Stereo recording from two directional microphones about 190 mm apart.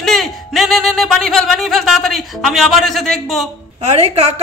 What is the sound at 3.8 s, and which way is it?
Speech, 35° right (ahead or behind).